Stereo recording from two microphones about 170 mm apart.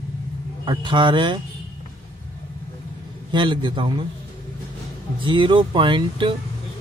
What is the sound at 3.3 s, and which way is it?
Speech, 30° right (ahead or behind).